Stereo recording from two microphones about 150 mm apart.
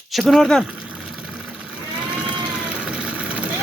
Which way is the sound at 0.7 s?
5° right (ahead or behind).